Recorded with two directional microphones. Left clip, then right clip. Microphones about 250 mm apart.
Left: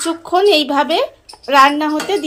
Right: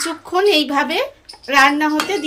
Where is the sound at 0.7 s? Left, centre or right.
Centre.